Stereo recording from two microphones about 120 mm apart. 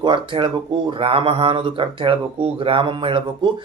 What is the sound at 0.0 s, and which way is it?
Speech, 45° right (ahead or behind).